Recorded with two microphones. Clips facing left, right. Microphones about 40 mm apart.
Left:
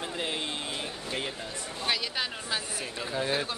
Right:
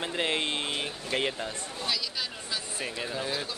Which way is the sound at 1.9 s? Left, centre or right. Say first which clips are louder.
Left 3 dB; left.